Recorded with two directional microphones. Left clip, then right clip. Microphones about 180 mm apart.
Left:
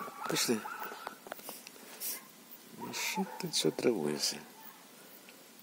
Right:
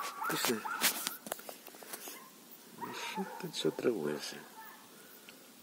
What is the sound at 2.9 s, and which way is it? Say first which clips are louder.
Speech: left 4 dB; 40° left (ahead or behind).